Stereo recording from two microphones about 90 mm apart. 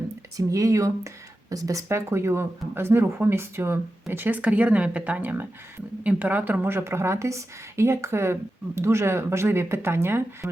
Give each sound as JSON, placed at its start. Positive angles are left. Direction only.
{"t": 0.3, "sound": "speech", "side_deg": -35}